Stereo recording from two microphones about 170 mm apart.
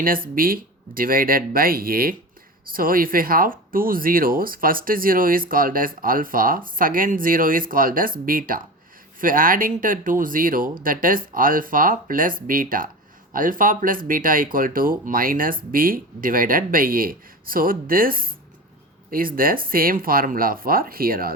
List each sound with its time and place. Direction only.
0.3 s speech: 55° right (ahead or behind)